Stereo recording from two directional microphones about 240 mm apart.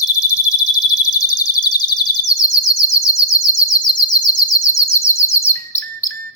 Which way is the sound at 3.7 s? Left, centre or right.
Centre.